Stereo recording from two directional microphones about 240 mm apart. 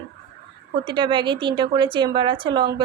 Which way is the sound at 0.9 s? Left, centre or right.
Centre.